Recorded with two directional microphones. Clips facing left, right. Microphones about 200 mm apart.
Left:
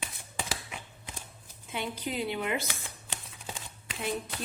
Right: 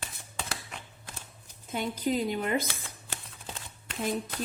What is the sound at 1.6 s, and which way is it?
A woman's voice, 40° right (ahead or behind).